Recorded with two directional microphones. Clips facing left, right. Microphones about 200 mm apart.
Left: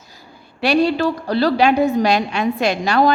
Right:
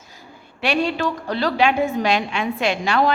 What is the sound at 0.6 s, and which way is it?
A woman's voice, 40° left (ahead or behind).